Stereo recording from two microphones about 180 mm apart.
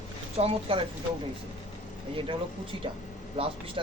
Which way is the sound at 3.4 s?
35° right (ahead or behind).